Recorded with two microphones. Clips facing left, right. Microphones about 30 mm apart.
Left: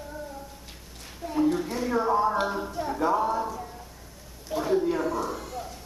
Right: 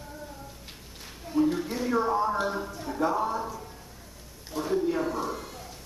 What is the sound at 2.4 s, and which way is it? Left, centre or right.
A woman's voice, centre.